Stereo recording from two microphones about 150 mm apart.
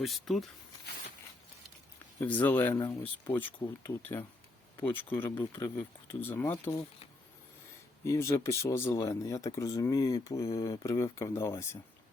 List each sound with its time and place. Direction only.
0.0 s speech: centre (ahead or behind)
2.2 s speech: 10° left (ahead or behind)
8.0 s speech: 20° left (ahead or behind)